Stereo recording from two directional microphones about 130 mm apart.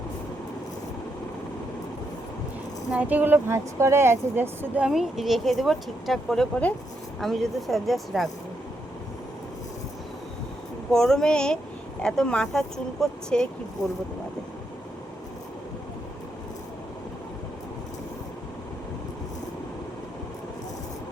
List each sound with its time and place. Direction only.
2.9 s speech: 10° right (ahead or behind)
4.8 s speech: 5° right (ahead or behind)
10.9 s speech: 5° left (ahead or behind)
13.8 s speech: 25° left (ahead or behind)